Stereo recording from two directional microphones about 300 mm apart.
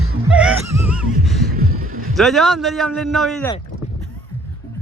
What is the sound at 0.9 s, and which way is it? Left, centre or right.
Heart sounds, centre.